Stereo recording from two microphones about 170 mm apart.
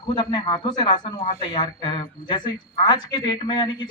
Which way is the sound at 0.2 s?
25° left (ahead or behind).